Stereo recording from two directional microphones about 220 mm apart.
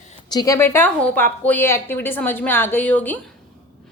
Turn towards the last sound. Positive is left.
turn(degrees=10)  # may be behind; listen again after turning